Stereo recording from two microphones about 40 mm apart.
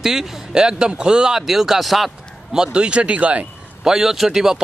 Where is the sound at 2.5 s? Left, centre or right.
Right.